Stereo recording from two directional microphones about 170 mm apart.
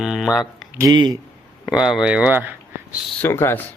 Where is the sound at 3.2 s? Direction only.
15° left (ahead or behind).